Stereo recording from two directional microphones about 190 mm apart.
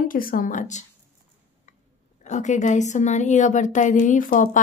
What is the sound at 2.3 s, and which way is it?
Speech, 40° left (ahead or behind).